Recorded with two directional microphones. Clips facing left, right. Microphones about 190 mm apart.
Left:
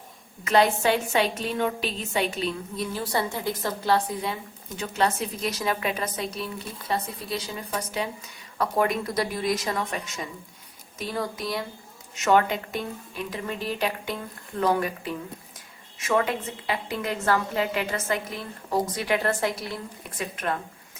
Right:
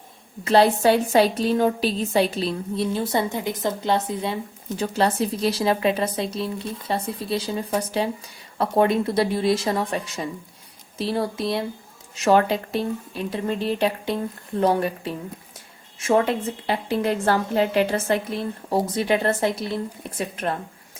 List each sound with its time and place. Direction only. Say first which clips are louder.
0.4 s a woman's voice: right 4 dB; 35° right (ahead or behind)
16.6 s a woman's voice: right 6 dB; 35° right (ahead or behind)